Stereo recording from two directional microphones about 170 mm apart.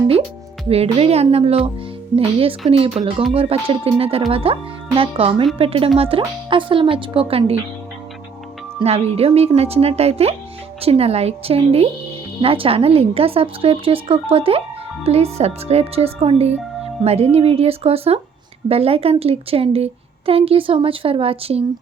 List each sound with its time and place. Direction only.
0.7 s speech: 35° right (ahead or behind)
8.8 s speech: 40° right (ahead or behind)